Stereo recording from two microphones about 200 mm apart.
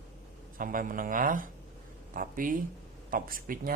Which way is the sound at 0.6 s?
45° right (ahead or behind).